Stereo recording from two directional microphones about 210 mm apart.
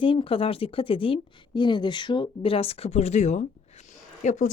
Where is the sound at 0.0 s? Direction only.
25° left (ahead or behind).